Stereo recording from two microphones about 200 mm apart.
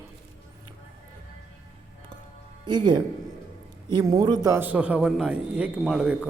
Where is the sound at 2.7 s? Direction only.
20° right (ahead or behind).